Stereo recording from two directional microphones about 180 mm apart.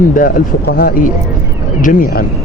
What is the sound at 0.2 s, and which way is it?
Speech, 55° left (ahead or behind).